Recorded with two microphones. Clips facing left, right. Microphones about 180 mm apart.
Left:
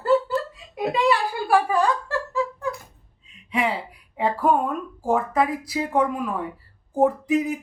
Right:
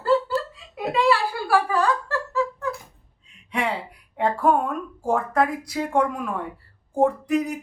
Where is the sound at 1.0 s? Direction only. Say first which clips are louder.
Even; 15° left (ahead or behind).